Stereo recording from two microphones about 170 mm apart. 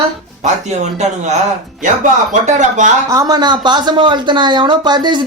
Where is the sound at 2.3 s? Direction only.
45° right (ahead or behind).